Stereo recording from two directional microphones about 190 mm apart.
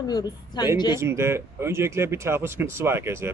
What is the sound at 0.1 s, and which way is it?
Speech, 20° left (ahead or behind).